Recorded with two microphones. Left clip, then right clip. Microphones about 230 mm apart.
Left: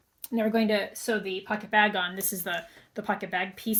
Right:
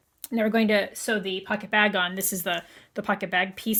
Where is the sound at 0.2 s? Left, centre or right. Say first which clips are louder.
Right 2 dB; right.